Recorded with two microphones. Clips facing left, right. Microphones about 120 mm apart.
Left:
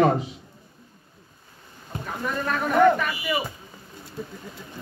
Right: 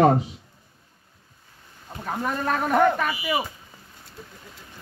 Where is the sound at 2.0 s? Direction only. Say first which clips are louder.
Right 2 dB; 40° right (ahead or behind).